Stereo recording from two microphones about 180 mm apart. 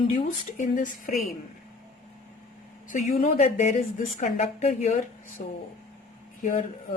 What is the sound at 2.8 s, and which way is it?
Speech, 45° left (ahead or behind).